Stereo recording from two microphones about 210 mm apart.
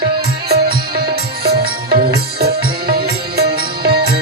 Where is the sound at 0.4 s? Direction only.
50° right (ahead or behind).